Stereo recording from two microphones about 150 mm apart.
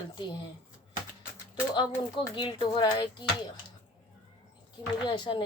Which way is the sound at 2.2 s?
30° left (ahead or behind).